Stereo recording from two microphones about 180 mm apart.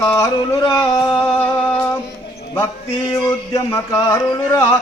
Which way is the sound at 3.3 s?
15° left (ahead or behind).